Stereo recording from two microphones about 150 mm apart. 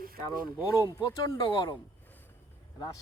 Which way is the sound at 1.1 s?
25° left (ahead or behind).